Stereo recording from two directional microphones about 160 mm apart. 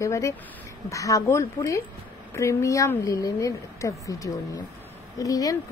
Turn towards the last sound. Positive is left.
turn(degrees=20)  # may be behind; listen again after turning